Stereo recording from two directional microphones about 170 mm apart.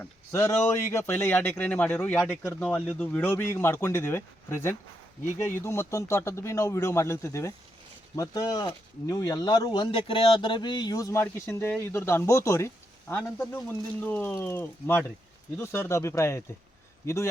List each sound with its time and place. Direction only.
0.0 s speech: 15° left (ahead or behind)